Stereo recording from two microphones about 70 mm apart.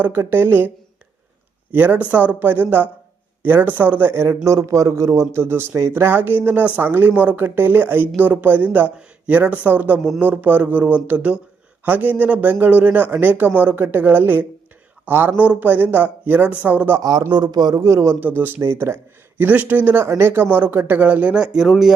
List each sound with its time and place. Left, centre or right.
0.0 s a woman's voice: right
1.7 s speech: right
4.1 s a woman's voice: right
5.3 s a woman's voice: right
15.4 s speech: right
17.0 s speech: right
17.7 s a man's voice: right
18.2 s speech: right
19.4 s speech: right; by 21.9 s centre